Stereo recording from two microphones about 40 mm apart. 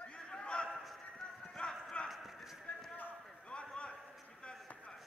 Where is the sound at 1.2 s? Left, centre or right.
Left.